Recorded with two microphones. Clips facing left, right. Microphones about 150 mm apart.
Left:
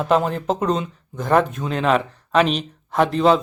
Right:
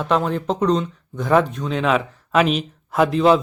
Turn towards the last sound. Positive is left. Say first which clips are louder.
# right 1 dB
turn(degrees=0)  # may be behind; listen again after turning